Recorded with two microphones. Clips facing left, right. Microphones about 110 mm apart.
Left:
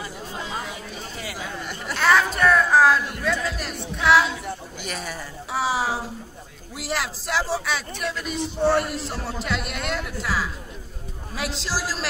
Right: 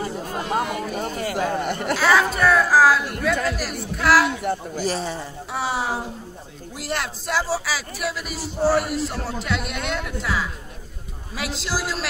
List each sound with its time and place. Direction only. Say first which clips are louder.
0.0 s a sound: right 6 dB; 50° right (ahead or behind)
2.0 s a sound: even; centre (ahead or behind)
3.9 s a man's voice: right 1 dB; centre (ahead or behind)
4.3 s speech: right 7 dB; 60° right (ahead or behind)
4.7 s speech: right 7 dB; 30° right (ahead or behind)
5.5 s a man's voice: left 1 dB; centre (ahead or behind)